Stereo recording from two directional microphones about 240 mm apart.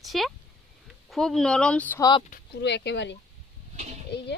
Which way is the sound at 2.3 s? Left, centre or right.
Left.